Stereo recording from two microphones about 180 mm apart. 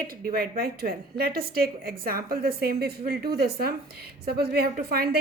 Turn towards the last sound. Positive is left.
turn(degrees=-60)  # may be behind; listen again after turning